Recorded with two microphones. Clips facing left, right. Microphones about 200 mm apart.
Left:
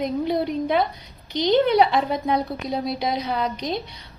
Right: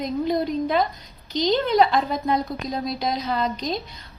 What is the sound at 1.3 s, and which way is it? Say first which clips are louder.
Speech: even; 60° left (ahead or behind).